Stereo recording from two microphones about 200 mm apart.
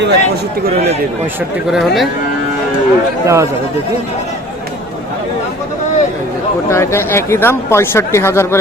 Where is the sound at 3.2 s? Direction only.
15° right (ahead or behind).